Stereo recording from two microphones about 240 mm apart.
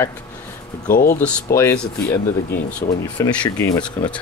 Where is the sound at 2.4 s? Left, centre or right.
Left.